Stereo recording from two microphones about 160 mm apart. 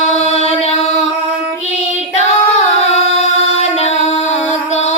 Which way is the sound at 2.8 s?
45° left (ahead or behind).